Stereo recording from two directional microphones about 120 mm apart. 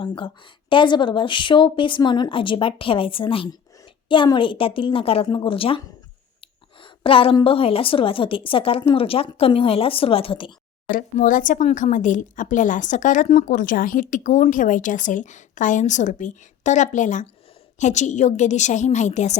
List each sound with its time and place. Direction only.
0.0 s speech: 45° left (ahead or behind)
6.4 s a sound: 45° left (ahead or behind)
7.4 s speech: 50° left (ahead or behind)
11.2 s a woman's voice: 90° left